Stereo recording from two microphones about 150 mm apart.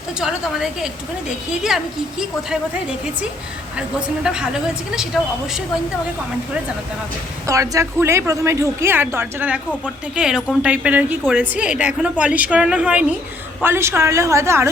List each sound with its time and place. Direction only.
0.2 s speech: 5° right (ahead or behind)
3.8 s speech: 5° right (ahead or behind)
7.4 s a woman's voice: 20° right (ahead or behind)